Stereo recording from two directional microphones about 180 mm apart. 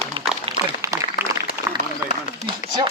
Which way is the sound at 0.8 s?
15° right (ahead or behind).